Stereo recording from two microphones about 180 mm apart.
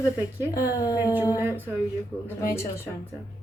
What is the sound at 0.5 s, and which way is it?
Speech, 15° left (ahead or behind).